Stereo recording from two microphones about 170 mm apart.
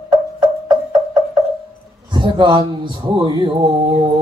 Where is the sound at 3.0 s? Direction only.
30° right (ahead or behind).